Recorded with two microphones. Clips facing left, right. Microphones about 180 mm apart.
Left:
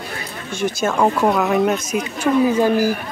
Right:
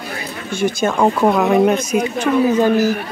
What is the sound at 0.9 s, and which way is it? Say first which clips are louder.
Speech: right 1 dB; 10° right (ahead or behind).